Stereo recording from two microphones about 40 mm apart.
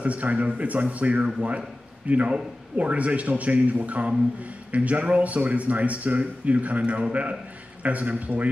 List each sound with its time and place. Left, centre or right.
0.0 s a man's voice: right